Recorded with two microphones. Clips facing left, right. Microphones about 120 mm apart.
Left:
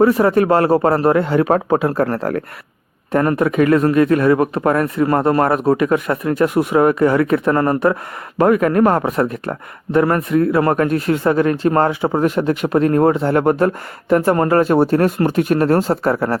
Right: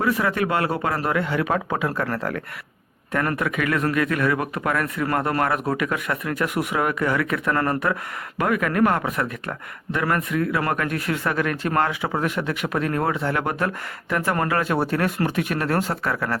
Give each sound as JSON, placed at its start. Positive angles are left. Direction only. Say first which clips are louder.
{"t": 0.0, "sound": "speech", "louder": "left 9 dB", "side_deg": 35}